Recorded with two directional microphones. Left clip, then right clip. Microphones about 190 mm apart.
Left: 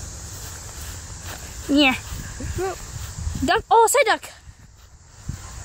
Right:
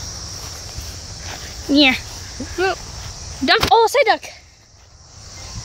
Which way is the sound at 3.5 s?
5° left (ahead or behind).